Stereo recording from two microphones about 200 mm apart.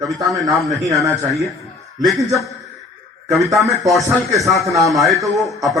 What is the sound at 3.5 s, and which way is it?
A man's voice, centre (ahead or behind).